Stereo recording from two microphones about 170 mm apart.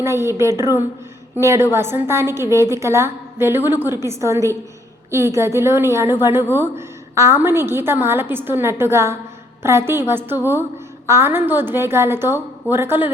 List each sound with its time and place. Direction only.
0.0 s a woman's voice: 15° right (ahead or behind)